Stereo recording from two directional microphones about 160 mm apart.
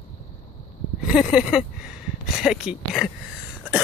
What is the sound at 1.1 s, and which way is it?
Speech, 5° right (ahead or behind).